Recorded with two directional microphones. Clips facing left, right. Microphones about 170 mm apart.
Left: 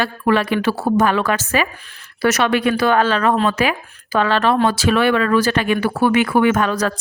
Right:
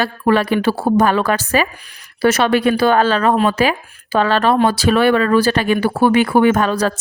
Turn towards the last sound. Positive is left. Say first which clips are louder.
# right 2 dB
turn(degrees=-35)  # may be behind; listen again after turning